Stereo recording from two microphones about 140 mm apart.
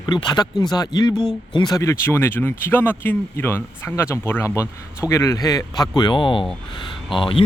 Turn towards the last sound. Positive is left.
turn(degrees=40)  # may be behind; listen again after turning